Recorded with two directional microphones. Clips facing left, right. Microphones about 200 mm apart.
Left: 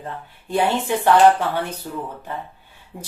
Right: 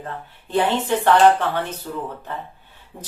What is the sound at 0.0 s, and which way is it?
Speech, 10° left (ahead or behind).